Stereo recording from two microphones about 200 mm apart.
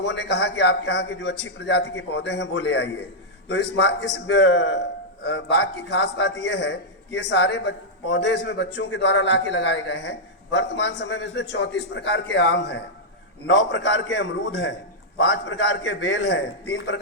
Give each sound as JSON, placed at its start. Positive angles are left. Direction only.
{"t": 0.2, "sound": "a man's voice", "side_deg": 60}
{"t": 3.5, "sound": "a man's voice", "side_deg": 70}